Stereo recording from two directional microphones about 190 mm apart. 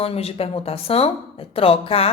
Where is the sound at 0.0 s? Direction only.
30° left (ahead or behind).